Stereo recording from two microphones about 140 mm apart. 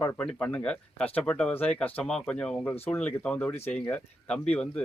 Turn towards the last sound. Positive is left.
turn(degrees=10)  # may be behind; listen again after turning